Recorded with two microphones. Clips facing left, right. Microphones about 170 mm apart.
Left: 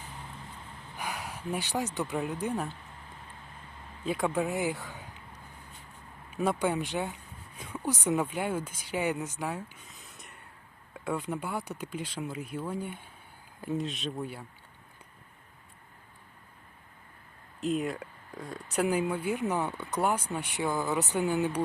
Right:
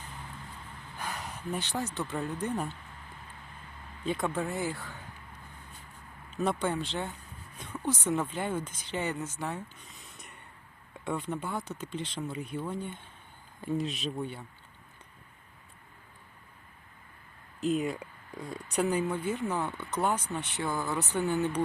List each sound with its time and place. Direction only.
0.9 s speech: 10° left (ahead or behind)
2.5 s speech: centre (ahead or behind)
4.0 s speech: 5° left (ahead or behind)
4.3 s speech: 15° left (ahead or behind)
6.3 s speech: 10° left (ahead or behind)
17.6 s speech: centre (ahead or behind)